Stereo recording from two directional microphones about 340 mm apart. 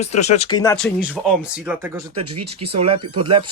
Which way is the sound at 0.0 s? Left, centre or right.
Centre.